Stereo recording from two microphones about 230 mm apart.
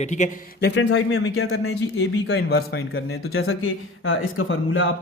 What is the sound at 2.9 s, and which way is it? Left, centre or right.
Speech, left.